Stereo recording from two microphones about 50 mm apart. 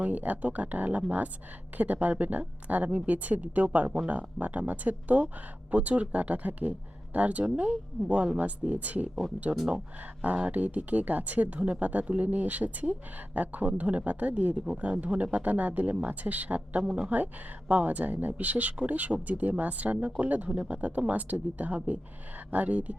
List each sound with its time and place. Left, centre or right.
0.0 s speech: right
7.9 s a woman's voice: centre
8.4 s speech: right
10.2 s speech: right
17.7 s speech: right